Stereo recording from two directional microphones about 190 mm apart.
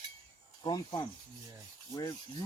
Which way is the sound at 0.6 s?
20° left (ahead or behind).